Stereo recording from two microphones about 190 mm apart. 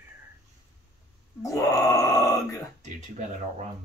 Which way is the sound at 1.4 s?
15° left (ahead or behind).